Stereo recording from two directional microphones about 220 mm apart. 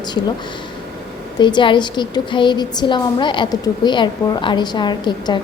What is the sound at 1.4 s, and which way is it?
A woman's voice, 20° left (ahead or behind).